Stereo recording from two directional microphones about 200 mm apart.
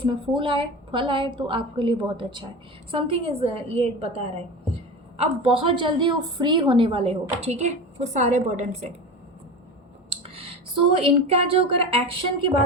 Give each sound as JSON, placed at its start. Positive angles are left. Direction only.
{"t": 0.0, "sound": "a woman's voice", "side_deg": -25}
{"t": 10.1, "sound": "a sound", "side_deg": -30}
{"t": 10.9, "sound": "a woman's voice", "side_deg": -30}